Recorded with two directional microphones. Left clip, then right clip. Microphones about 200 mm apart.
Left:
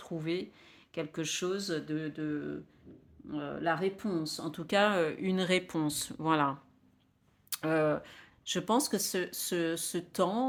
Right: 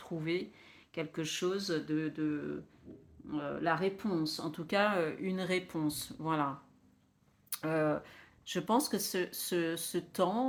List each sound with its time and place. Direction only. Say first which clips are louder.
0.0 s speech: left 1 dB; 25° left (ahead or behind); by 6.5 s 45° left (ahead or behind)
7.5 s speech: left 3 dB; 35° left (ahead or behind)